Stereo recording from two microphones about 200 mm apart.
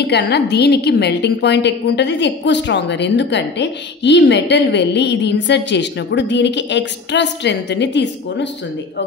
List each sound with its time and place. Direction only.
0.0 s a woman's voice: 55° left (ahead or behind)